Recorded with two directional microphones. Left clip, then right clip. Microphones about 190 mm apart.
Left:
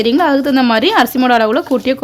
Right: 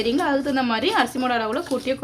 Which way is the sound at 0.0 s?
50° left (ahead or behind).